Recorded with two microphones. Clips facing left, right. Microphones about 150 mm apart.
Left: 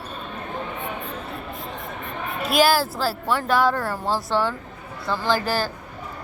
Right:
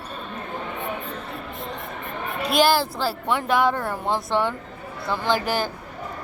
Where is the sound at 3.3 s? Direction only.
20° right (ahead or behind).